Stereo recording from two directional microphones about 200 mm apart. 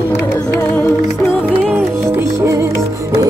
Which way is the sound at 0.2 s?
10° left (ahead or behind).